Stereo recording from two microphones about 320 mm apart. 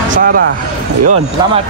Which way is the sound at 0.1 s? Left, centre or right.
Right.